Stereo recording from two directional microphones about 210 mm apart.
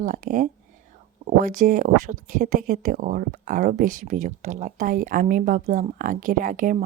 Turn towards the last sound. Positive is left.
turn(degrees=-40)  # may be behind; listen again after turning